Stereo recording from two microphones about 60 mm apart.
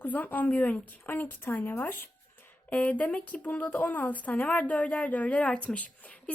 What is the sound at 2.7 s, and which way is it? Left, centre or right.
Speech, left.